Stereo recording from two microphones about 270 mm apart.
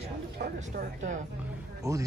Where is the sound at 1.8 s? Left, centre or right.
Centre.